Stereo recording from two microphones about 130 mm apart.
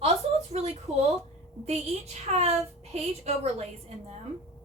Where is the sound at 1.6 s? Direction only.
55° right (ahead or behind).